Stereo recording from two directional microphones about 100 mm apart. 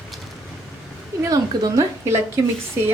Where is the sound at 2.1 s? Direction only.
25° right (ahead or behind).